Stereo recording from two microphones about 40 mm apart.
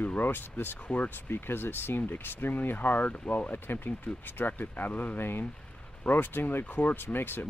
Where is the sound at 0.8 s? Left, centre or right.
Left.